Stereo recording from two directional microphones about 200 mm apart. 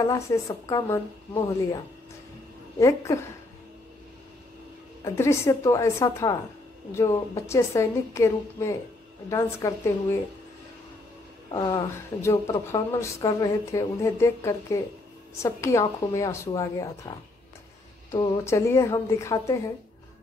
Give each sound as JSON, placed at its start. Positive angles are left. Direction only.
{"t": 0.0, "sound": "speech", "side_deg": 15}
{"t": 2.8, "sound": "speech", "side_deg": 15}
{"t": 5.0, "sound": "speech", "side_deg": 15}
{"t": 11.5, "sound": "speech", "side_deg": 20}
{"t": 18.1, "sound": "speech", "side_deg": 15}